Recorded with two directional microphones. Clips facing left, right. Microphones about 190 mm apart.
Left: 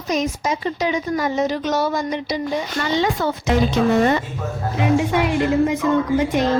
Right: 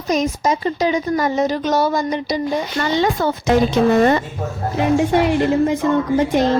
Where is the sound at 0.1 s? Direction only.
40° right (ahead or behind).